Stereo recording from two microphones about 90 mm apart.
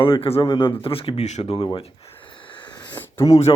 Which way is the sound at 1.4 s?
70° left (ahead or behind).